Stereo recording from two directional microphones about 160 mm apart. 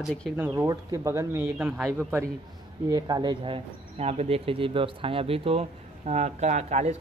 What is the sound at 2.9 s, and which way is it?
Speech, 25° right (ahead or behind).